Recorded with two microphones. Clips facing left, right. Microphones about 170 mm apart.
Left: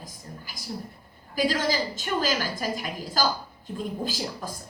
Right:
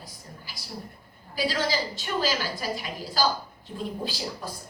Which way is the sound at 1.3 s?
45° left (ahead or behind).